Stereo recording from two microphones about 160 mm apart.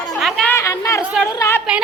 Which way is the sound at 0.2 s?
Centre (ahead or behind).